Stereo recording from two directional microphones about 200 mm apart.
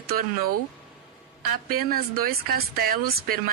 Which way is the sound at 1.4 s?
50° right (ahead or behind).